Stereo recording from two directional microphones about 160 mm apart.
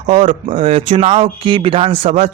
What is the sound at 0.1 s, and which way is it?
Speech, 45° right (ahead or behind).